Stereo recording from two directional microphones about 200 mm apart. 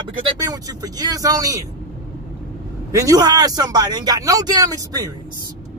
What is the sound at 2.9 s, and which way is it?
Speech, 15° right (ahead or behind).